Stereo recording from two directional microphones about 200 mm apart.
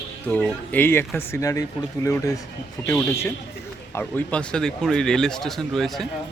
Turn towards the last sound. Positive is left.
turn(degrees=0)  # may be behind; listen again after turning